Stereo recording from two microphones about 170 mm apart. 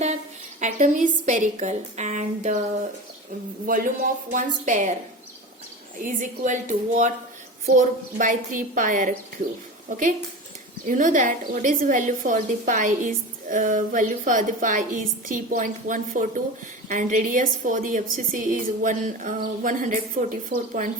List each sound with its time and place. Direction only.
0.6 s a woman's voice: 50° right (ahead or behind)
3.7 s a woman's voice: 50° right (ahead or behind)
6.0 s a woman's voice: 50° right (ahead or behind)
10.8 s a woman's voice: 50° right (ahead or behind)